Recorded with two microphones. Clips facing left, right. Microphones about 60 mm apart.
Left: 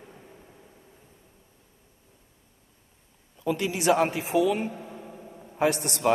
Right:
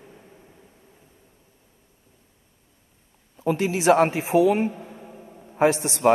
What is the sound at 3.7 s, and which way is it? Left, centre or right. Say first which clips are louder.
Speech: right 5 dB; right.